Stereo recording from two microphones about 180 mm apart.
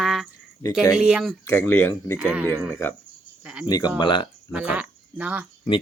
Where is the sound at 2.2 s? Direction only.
5° right (ahead or behind).